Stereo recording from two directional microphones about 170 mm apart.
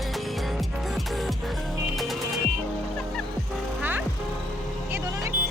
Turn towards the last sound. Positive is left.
turn(degrees=-15)  # may be behind; listen again after turning